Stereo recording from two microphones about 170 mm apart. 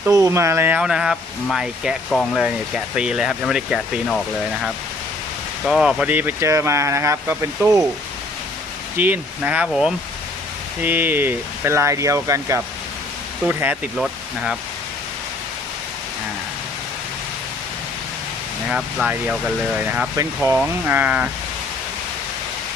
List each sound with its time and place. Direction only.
0.0 s speech: 20° right (ahead or behind)
2.0 s speech: 5° left (ahead or behind)
2.4 s speech: 5° right (ahead or behind)
5.6 s speech: centre (ahead or behind); by 7.9 s 15° right (ahead or behind)
9.0 s speech: 10° right (ahead or behind)
13.9 s speech: centre (ahead or behind)
18.7 s speech: 5° right (ahead or behind)